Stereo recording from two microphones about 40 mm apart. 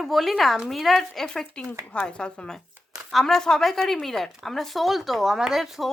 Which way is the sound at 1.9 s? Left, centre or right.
Left.